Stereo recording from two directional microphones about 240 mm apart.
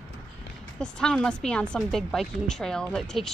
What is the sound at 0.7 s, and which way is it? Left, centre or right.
Speech, centre.